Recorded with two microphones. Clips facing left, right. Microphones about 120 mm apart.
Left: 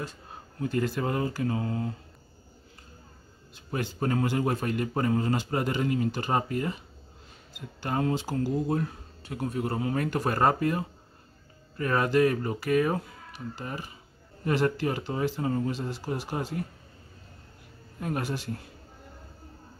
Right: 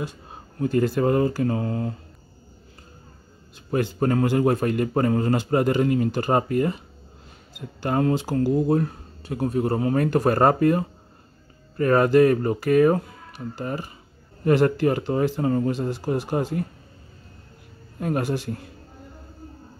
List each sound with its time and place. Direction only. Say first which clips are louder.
0.6 s a man's voice: right 7 dB; 40° right (ahead or behind)
3.7 s a man's voice: right 7 dB; 50° right (ahead or behind)
7.8 s a man's voice: right 6 dB; 50° right (ahead or behind)
18.0 s a man's voice: right 6 dB; 50° right (ahead or behind)